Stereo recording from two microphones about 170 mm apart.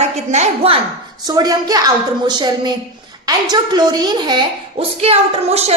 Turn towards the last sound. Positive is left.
turn(degrees=-40)  # may be behind; listen again after turning